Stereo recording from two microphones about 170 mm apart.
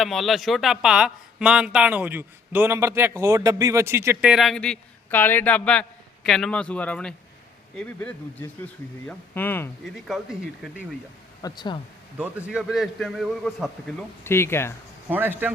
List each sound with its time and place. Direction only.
0.0 s speech: centre (ahead or behind)
9.8 s speech: centre (ahead or behind)
11.4 s speech: 25° left (ahead or behind)
12.1 s speech: 10° right (ahead or behind)
14.3 s speech: 15° left (ahead or behind)
15.1 s a man's voice: 10° right (ahead or behind)